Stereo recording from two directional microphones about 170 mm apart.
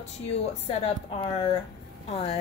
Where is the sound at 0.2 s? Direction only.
40° left (ahead or behind).